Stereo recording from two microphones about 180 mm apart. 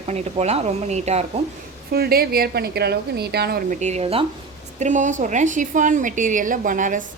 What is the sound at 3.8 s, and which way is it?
Speech, 40° right (ahead or behind).